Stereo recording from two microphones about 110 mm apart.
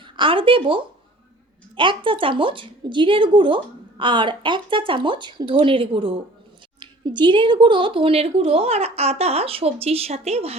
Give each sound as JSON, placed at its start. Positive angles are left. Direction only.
{"t": 0.0, "sound": "a woman's voice", "side_deg": -50}
{"t": 6.7, "sound": "speech", "side_deg": -45}